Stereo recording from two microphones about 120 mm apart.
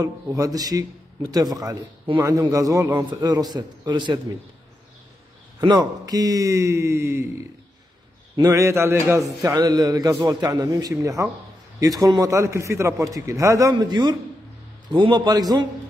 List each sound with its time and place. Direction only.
0.0 s a man's voice: 30° right (ahead or behind)
5.6 s a man's voice: 35° right (ahead or behind)